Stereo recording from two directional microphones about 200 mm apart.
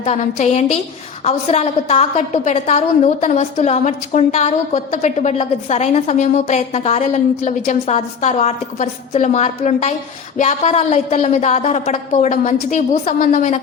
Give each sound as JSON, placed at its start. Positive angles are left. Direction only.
{"t": 0.0, "sound": "a woman's voice", "side_deg": 40}